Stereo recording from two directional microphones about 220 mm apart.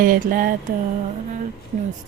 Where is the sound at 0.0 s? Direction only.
40° right (ahead or behind).